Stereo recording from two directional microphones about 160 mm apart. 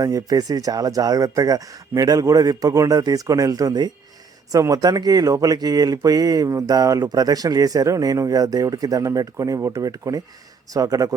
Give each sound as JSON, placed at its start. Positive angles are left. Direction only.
{"t": 0.0, "sound": "speech", "side_deg": -20}